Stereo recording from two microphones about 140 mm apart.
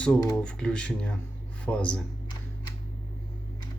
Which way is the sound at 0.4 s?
5° left (ahead or behind).